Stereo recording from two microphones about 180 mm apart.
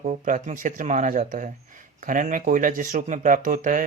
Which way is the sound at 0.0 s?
45° right (ahead or behind).